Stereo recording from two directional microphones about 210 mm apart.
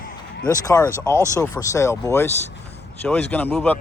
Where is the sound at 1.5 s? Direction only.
15° left (ahead or behind).